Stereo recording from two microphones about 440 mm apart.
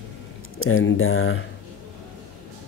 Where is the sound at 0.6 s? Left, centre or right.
Left.